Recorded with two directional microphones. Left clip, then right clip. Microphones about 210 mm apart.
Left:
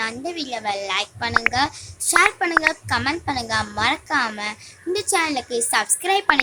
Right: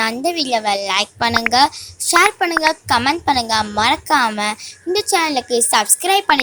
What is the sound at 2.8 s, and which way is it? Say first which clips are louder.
A child's voice: right 7 dB; 30° right (ahead or behind).